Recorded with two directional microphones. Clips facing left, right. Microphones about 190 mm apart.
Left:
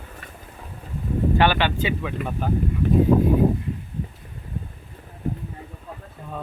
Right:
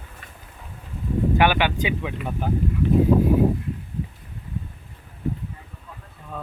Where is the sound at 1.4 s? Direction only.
15° right (ahead or behind).